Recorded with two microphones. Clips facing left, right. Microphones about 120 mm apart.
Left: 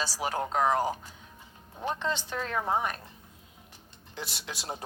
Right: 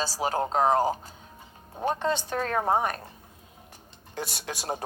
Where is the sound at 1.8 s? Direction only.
45° right (ahead or behind).